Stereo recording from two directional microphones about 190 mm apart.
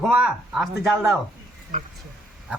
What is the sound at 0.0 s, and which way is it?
Speech, 5° right (ahead or behind).